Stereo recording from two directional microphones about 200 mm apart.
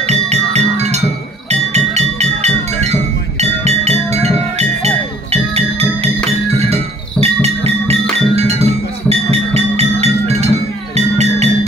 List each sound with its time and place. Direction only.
0.0 s music: 35° right (ahead or behind)